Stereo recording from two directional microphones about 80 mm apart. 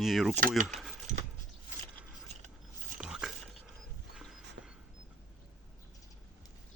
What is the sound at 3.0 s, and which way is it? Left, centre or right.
Biting, centre.